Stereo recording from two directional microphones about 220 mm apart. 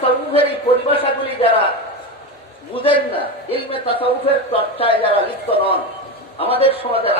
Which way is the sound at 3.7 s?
25° left (ahead or behind).